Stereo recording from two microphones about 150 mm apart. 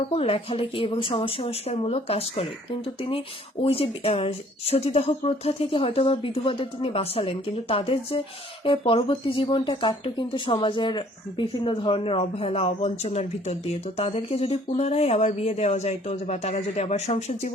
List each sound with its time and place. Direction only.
0.1 s speech: 40° left (ahead or behind)
3.6 s speech: 40° left (ahead or behind)